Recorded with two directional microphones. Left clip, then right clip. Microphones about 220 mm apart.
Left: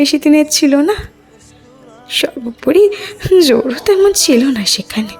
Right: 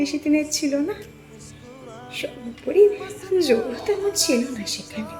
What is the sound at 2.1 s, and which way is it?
A woman's voice, 45° left (ahead or behind).